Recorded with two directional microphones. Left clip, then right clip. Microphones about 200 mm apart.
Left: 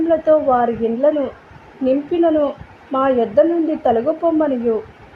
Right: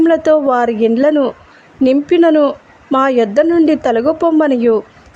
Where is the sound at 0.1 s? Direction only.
35° right (ahead or behind).